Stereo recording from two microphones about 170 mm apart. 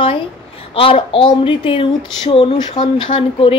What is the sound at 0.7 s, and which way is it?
Speech, 30° left (ahead or behind).